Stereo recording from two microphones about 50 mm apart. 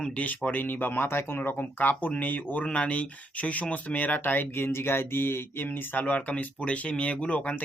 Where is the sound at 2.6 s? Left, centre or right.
Left.